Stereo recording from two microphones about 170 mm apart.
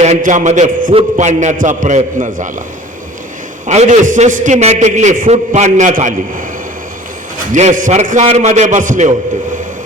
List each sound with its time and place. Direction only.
0.0 s a man's voice: 45° right (ahead or behind)
3.7 s a man's voice: 45° right (ahead or behind)
7.5 s a man's voice: 45° right (ahead or behind)